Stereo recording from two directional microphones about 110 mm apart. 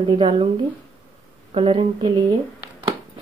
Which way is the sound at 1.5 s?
65° right (ahead or behind).